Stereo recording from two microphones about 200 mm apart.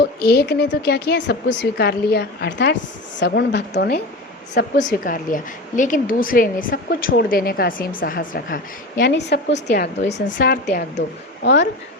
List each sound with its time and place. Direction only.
0.0 s a woman's voice: 55° left (ahead or behind)
4.8 s a woman's voice: 40° left (ahead or behind)
10.0 s a woman's voice: 35° left (ahead or behind); by 10.8 s 50° left (ahead or behind)
11.4 s a woman's voice: 60° left (ahead or behind)